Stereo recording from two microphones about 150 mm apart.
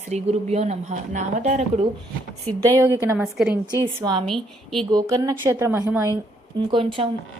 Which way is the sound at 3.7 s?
25° right (ahead or behind).